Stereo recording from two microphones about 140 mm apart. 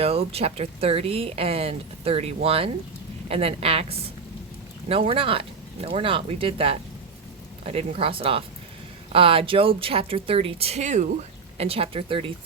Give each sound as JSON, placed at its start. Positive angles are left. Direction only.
{"t": 0.0, "sound": "speech", "side_deg": -45}